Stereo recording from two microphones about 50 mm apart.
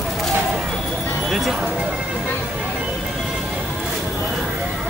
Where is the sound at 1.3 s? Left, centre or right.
Centre.